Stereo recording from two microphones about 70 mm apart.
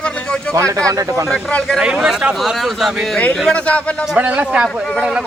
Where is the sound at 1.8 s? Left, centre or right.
Centre.